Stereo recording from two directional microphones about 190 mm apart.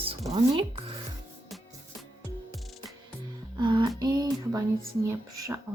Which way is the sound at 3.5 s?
25° right (ahead or behind).